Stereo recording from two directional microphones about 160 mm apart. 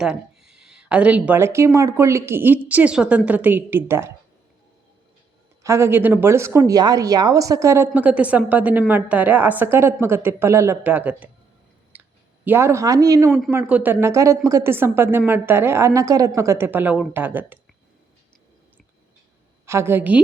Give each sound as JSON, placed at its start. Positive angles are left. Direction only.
{"t": 0.0, "sound": "speech", "side_deg": -5}
{"t": 5.6, "sound": "speech", "side_deg": -15}
{"t": 11.9, "sound": "clicking", "side_deg": -10}
{"t": 12.5, "sound": "speech", "side_deg": -15}
{"t": 19.6, "sound": "speech", "side_deg": -15}